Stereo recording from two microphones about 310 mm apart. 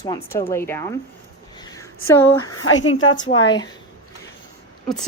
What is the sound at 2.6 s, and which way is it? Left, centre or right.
Speech, left.